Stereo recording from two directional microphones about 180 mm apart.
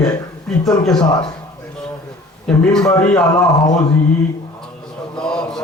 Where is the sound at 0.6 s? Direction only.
Centre (ahead or behind).